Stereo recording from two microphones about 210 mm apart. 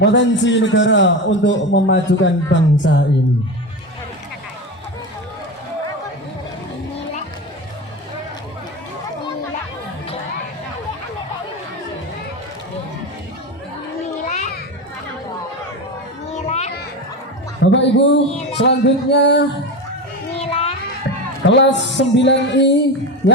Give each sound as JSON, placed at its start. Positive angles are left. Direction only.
{"t": 0.0, "sound": "a man's voice", "side_deg": 60}
{"t": 14.3, "sound": "children playing", "side_deg": 40}
{"t": 16.5, "sound": "children playing", "side_deg": 30}
{"t": 17.6, "sound": "a sound", "side_deg": 60}
{"t": 18.6, "sound": "a man's voice", "side_deg": 55}
{"t": 20.4, "sound": "children playing", "side_deg": 30}
{"t": 21.4, "sound": "a man's voice", "side_deg": 55}